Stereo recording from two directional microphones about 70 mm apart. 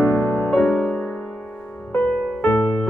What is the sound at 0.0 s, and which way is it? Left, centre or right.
Music, left.